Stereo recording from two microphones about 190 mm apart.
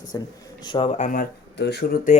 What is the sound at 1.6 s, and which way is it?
Speech, 65° left (ahead or behind).